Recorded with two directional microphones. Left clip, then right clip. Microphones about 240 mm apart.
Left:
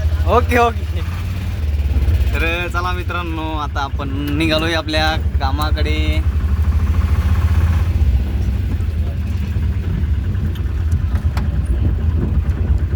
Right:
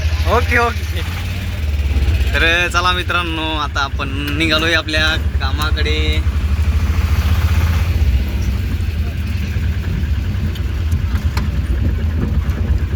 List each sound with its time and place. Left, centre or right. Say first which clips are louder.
0.3 s speech: left 1 dB; left
2.3 s speech: right 6 dB; centre
4.4 s speech: right 3 dB; left